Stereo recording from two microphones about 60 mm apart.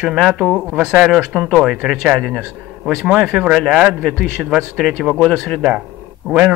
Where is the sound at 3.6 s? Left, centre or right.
Centre.